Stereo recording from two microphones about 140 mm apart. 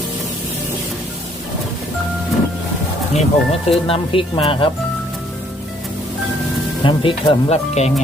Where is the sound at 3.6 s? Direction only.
40° left (ahead or behind).